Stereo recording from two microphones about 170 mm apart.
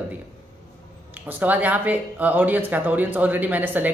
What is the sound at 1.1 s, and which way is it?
Speech, 10° right (ahead or behind).